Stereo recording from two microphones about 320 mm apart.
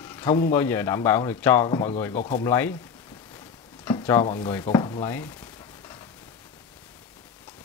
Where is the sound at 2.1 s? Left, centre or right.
Left.